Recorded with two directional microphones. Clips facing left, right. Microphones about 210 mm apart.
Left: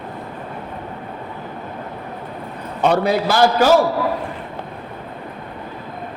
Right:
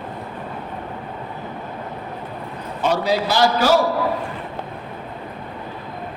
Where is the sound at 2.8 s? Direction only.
60° left (ahead or behind).